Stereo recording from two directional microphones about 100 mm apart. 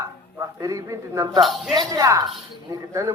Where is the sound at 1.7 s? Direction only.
40° right (ahead or behind).